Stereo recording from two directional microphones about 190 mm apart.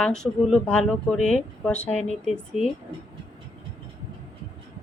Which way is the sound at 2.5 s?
35° left (ahead or behind).